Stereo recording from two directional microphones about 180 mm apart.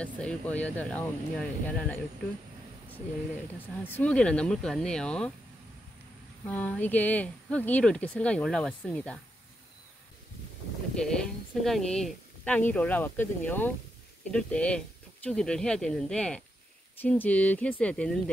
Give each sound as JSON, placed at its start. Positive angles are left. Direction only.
{"t": 0.0, "sound": "speech", "side_deg": 5}
{"t": 3.5, "sound": "speech", "side_deg": 10}
{"t": 6.4, "sound": "speech", "side_deg": 10}
{"t": 11.0, "sound": "speech", "side_deg": 5}